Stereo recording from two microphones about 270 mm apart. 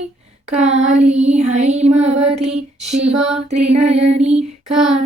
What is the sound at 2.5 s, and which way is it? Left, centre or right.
Female singing, centre.